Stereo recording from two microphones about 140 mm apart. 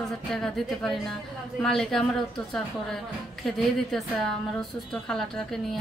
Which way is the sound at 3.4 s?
Centre (ahead or behind).